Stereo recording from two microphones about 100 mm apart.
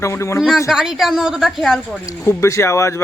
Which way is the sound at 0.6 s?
5° right (ahead or behind).